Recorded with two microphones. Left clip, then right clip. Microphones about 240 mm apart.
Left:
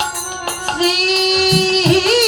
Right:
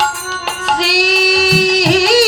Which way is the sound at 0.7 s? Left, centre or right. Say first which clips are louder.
Right 4 dB; right.